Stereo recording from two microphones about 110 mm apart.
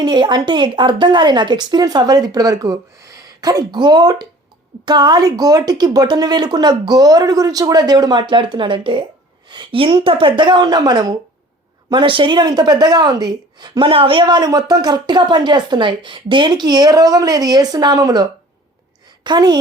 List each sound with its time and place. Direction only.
0.0 s a woman's voice: 40° right (ahead or behind)